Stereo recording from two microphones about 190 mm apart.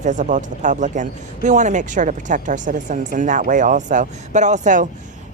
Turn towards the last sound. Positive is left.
turn(degrees=-40)  # may be behind; listen again after turning